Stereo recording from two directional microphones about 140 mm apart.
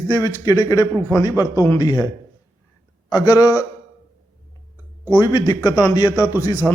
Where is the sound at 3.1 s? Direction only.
25° left (ahead or behind).